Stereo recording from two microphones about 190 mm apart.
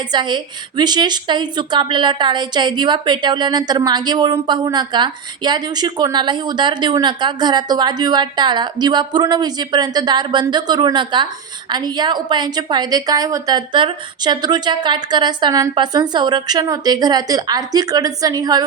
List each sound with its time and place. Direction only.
0.1 s a woman's voice: 25° right (ahead or behind)